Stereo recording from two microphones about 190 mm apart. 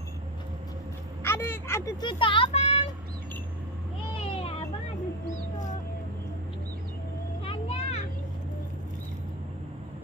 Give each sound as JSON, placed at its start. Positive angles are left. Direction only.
{"t": 1.2, "sound": "speech", "side_deg": 10}
{"t": 4.2, "sound": "children playing", "side_deg": 30}
{"t": 7.4, "sound": "children playing", "side_deg": 35}